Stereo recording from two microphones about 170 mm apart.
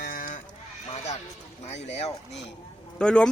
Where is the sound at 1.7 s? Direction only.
40° left (ahead or behind).